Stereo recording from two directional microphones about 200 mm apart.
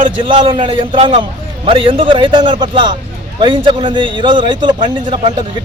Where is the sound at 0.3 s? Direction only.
25° right (ahead or behind).